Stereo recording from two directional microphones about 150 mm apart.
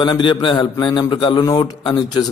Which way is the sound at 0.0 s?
30° left (ahead or behind).